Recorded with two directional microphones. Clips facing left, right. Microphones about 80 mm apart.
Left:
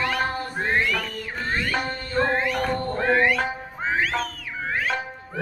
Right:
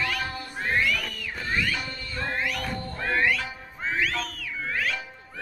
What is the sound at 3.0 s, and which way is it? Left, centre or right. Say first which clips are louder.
Music: left 4 dB; left.